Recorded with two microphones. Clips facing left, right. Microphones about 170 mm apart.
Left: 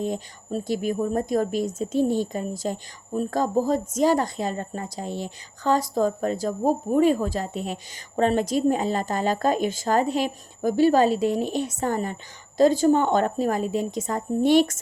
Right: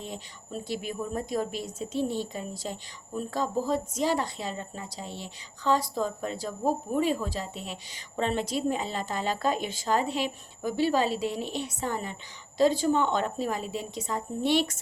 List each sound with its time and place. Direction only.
0.0 s a woman's voice: 45° left (ahead or behind)